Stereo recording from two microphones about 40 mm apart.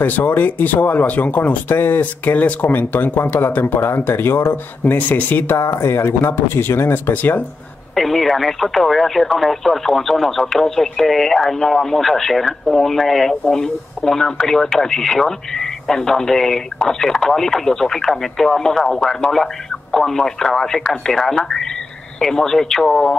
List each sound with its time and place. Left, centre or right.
0.0 s speech: left
2.3 s speech: left
2.9 s speech: left
3.7 s speech: left
4.9 s speech: left
5.7 s speech: left
7.9 s speech: centre
18.8 s speech: centre
19.3 s speech: centre